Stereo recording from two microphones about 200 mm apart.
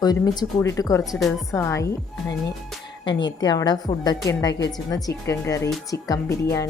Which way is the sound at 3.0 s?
20° left (ahead or behind).